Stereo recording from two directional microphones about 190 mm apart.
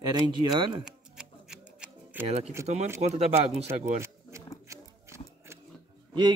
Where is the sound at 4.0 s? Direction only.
15° right (ahead or behind).